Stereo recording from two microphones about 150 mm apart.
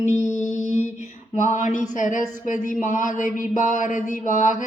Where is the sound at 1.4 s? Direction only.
55° left (ahead or behind).